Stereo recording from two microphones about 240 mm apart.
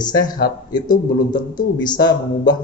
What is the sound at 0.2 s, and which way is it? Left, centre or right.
Speech, left.